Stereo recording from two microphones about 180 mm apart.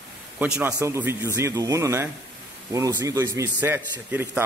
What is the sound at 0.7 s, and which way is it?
A man's voice, 15° right (ahead or behind).